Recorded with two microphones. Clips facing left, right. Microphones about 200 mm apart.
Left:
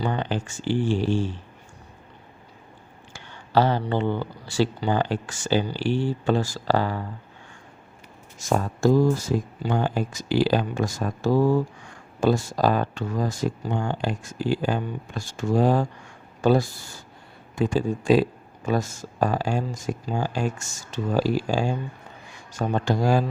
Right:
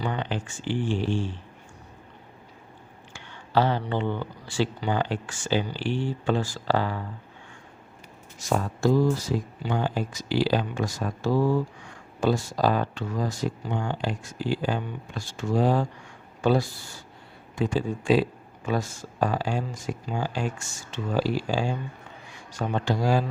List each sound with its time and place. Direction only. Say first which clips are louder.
0.0 s speech: left 3 dB; 40° left (ahead or behind)
3.1 s speech: left 3 dB; 40° left (ahead or behind)
8.4 s speech: left 2 dB; 45° left (ahead or behind)